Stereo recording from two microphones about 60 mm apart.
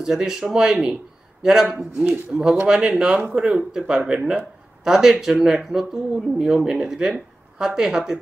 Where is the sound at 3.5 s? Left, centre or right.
Centre.